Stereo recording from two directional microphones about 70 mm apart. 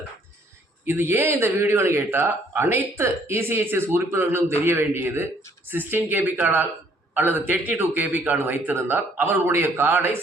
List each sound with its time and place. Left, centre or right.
0.9 s a man's voice: right